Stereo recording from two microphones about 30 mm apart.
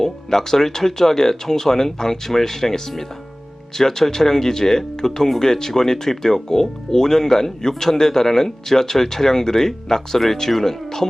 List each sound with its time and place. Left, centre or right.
0.0 s speech: centre